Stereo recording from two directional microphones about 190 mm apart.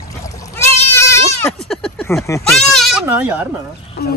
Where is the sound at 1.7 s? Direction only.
5° left (ahead or behind).